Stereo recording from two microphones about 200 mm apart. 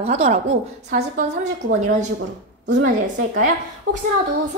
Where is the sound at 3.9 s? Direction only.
90° right.